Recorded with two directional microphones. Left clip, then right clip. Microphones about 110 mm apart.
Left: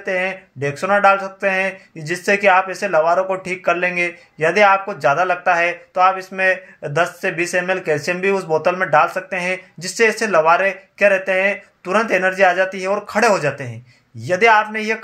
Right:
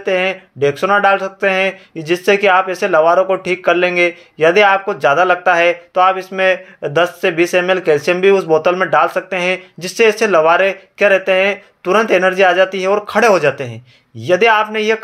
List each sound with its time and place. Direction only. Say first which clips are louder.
0.0 s speech: right 5 dB; 20° right (ahead or behind)